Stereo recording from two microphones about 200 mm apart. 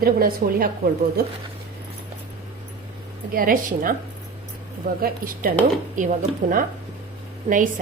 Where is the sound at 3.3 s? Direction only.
45° right (ahead or behind).